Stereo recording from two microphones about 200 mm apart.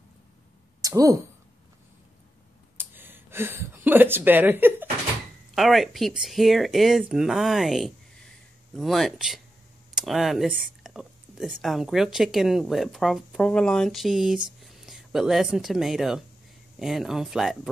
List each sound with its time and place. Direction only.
0.8 s speech: 15° right (ahead or behind)
2.8 s a sound: 10° right (ahead or behind)
5.5 s speech: centre (ahead or behind)